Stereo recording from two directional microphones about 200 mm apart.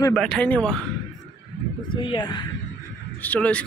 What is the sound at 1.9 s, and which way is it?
Speech, 25° left (ahead or behind).